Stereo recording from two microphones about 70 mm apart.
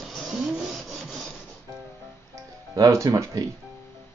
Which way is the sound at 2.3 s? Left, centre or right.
Right.